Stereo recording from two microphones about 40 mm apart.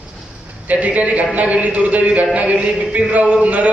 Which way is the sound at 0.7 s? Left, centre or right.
Right.